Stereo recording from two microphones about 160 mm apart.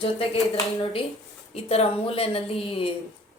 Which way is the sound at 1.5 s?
40° left (ahead or behind).